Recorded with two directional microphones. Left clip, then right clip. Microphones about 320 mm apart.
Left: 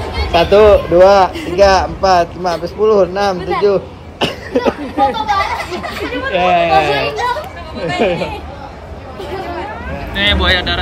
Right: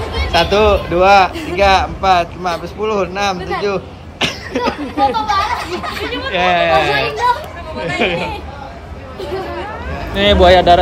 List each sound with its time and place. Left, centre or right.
0.0 s a man's voice: centre
9.2 s chatter: centre
10.1 s speech: centre